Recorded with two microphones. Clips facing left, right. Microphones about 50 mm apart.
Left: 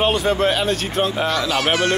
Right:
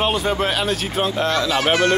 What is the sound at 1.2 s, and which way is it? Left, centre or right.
Speech, centre.